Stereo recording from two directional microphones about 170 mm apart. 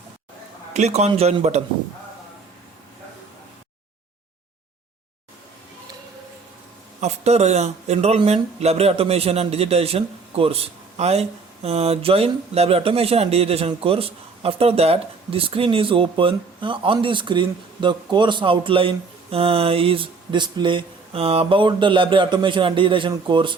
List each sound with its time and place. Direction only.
0.7 s speech: 40° right (ahead or behind)
7.0 s speech: 40° right (ahead or behind)